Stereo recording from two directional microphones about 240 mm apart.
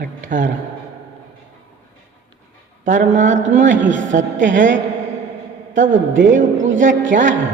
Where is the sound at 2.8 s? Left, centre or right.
Right.